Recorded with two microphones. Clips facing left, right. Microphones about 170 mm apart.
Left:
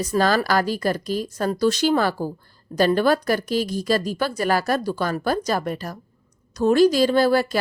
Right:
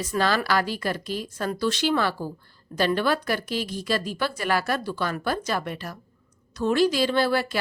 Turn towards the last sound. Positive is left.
turn(degrees=40)  # may be behind; listen again after turning